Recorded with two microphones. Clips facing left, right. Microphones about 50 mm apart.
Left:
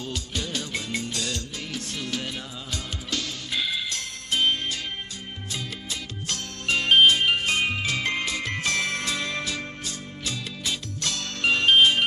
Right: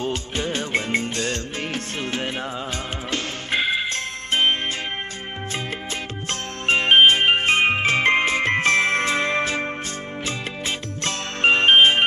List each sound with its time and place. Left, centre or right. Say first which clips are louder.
0.0 s music: right 7 dB; right
6.2 s jingle bell: right 5 dB; right
10.2 s music: right 3 dB; right